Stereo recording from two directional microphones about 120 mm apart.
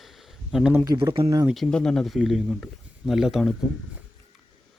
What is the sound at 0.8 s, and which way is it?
Speech, 40° right (ahead or behind).